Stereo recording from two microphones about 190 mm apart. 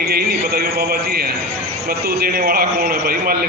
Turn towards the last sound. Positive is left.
turn(degrees=-55)  # may be behind; listen again after turning